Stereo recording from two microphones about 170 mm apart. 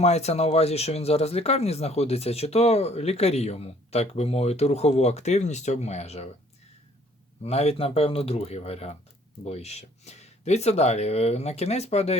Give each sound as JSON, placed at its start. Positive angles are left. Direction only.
{"t": 0.0, "sound": "speech", "side_deg": 40}
{"t": 7.4, "sound": "speech", "side_deg": 35}